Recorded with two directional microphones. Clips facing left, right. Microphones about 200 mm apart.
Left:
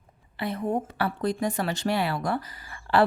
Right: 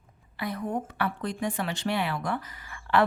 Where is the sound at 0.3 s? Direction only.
25° left (ahead or behind).